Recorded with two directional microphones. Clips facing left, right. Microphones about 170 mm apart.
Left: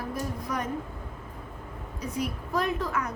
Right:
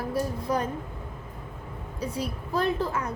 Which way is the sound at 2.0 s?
30° right (ahead or behind).